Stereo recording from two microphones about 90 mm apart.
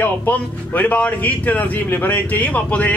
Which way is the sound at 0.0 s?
20° left (ahead or behind).